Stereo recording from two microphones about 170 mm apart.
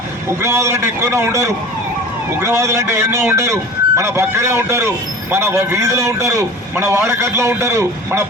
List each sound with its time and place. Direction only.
0.3 s speech: 15° right (ahead or behind)